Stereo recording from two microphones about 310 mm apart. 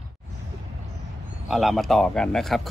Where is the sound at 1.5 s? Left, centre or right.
Centre.